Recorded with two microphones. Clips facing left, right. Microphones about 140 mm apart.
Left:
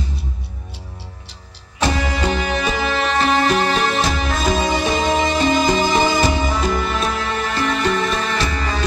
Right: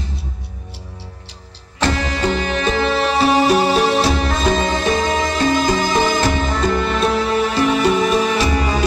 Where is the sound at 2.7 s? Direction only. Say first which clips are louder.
Right 3 dB; centre (ahead or behind).